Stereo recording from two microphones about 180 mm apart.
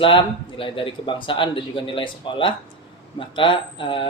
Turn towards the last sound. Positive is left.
turn(degrees=30)  # may be behind; listen again after turning